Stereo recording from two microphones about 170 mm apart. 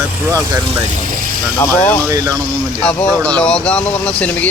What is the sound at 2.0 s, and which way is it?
Speech, 20° right (ahead or behind).